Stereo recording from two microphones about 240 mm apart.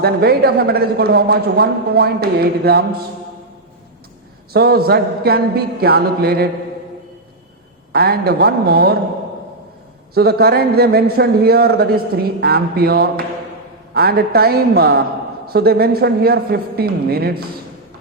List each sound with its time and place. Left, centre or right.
0.0 s a man's voice: right
4.5 s a man's voice: right
7.9 s a man's voice: right
10.2 s a man's voice: right